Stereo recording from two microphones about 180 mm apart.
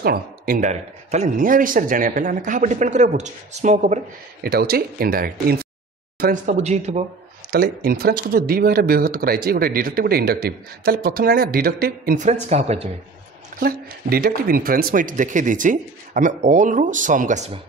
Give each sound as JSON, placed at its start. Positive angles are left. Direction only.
{"t": 0.0, "sound": "speech", "side_deg": -55}
{"t": 4.4, "sound": "speech", "side_deg": -60}
{"t": 6.5, "sound": "a man's voice", "side_deg": -40}
{"t": 7.5, "sound": "speech", "side_deg": -60}
{"t": 13.6, "sound": "speech", "side_deg": -55}